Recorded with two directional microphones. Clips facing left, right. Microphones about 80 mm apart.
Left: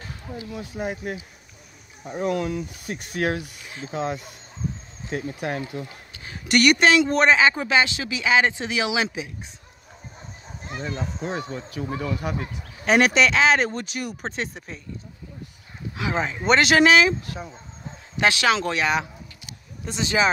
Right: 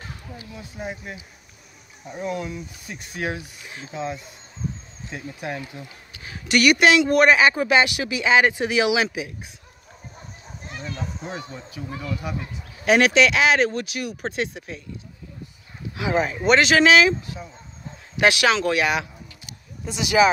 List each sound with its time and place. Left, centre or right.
0.6 s speech: left
2.1 s speech: left
6.2 s speech: centre
10.7 s a sound: left
11.2 s speech: left
12.8 s speech: centre
16.0 s speech: centre
16.3 s speech: centre
17.2 s speech: left
18.2 s speech: centre
18.5 s speech: centre
18.8 s speech: centre